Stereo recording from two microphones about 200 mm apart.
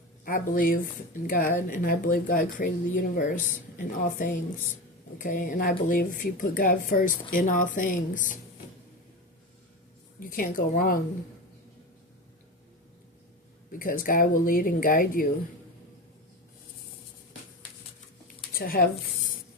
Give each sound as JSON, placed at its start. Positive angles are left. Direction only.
{"t": 0.3, "sound": "speech", "side_deg": 45}
{"t": 10.2, "sound": "speech", "side_deg": 45}
{"t": 13.7, "sound": "speech", "side_deg": 45}
{"t": 18.5, "sound": "speech", "side_deg": 45}